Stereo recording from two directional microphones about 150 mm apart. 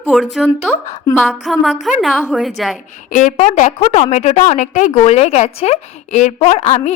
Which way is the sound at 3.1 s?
55° left (ahead or behind).